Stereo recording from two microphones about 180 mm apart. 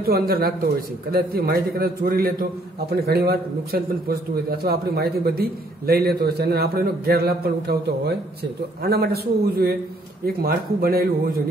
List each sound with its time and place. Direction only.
0.3 s a man's voice: 55° right (ahead or behind)